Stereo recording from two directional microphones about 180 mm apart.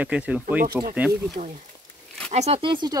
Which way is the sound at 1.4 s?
40° right (ahead or behind).